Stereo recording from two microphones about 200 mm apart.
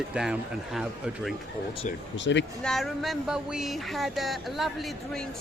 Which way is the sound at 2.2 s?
65° left (ahead or behind).